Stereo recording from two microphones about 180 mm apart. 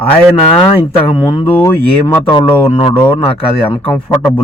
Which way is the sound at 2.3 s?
25° left (ahead or behind).